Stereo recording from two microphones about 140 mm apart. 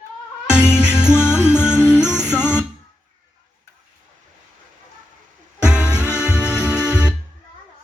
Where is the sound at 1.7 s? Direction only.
15° left (ahead or behind).